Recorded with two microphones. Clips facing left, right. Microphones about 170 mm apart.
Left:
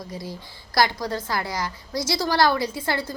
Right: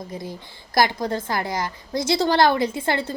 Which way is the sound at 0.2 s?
20° right (ahead or behind).